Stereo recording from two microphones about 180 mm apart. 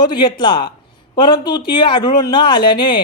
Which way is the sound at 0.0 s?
25° left (ahead or behind).